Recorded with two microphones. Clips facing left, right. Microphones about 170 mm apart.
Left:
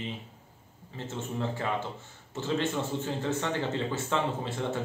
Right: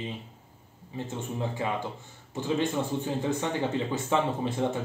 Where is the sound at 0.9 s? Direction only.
15° right (ahead or behind).